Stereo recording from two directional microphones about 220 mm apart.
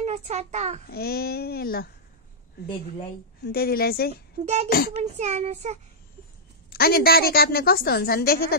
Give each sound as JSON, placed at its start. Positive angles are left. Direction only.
{"t": 0.0, "sound": "a child's voice", "side_deg": -30}
{"t": 0.8, "sound": "a woman's voice", "side_deg": 45}
{"t": 3.5, "sound": "a woman's voice", "side_deg": 45}
{"t": 4.9, "sound": "child singing", "side_deg": -30}
{"t": 6.7, "sound": "a woman's voice", "side_deg": 45}